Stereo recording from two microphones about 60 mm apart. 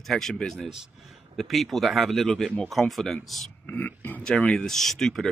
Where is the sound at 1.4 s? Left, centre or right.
Centre.